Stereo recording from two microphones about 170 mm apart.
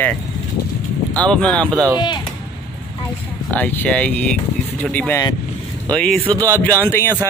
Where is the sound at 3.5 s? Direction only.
10° left (ahead or behind).